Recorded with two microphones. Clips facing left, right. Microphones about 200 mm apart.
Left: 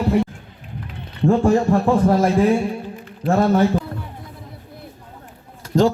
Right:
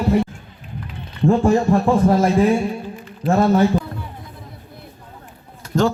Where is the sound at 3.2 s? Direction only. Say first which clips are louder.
Right 1 dB; 55° left (ahead or behind).